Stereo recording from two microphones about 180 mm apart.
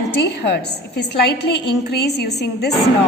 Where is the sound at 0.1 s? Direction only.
70° left (ahead or behind).